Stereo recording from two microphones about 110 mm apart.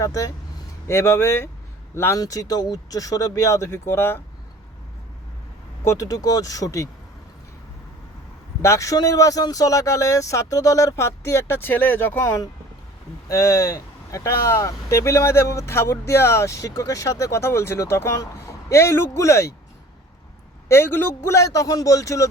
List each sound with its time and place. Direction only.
0.0 s speech: 30° left (ahead or behind)
5.8 s speech: 30° left (ahead or behind)
8.6 s speech: 30° left (ahead or behind)
20.7 s speech: 20° left (ahead or behind)